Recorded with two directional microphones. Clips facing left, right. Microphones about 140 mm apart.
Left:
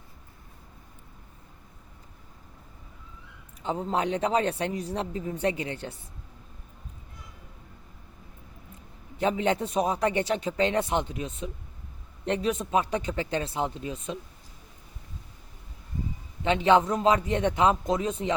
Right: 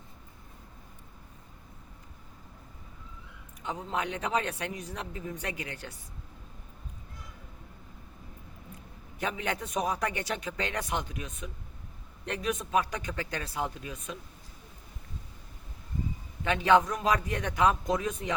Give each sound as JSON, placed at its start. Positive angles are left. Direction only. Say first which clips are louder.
{"t": 3.6, "sound": "speech", "louder": "left 6 dB", "side_deg": 30}
{"t": 9.1, "sound": "a man's voice", "louder": "left 8 dB", "side_deg": 30}
{"t": 16.4, "sound": "a man's voice", "louder": "left 2 dB", "side_deg": 25}